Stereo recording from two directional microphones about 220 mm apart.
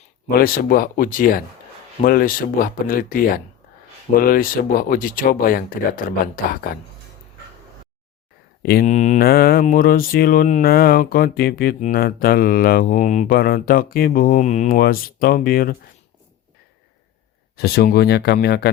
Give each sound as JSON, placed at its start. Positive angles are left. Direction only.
{"t": 0.3, "sound": "speech", "side_deg": 40}
{"t": 8.6, "sound": "speech", "side_deg": 40}
{"t": 17.6, "sound": "speech", "side_deg": 45}